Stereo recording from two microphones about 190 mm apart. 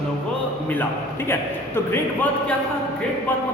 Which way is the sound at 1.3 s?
10° left (ahead or behind).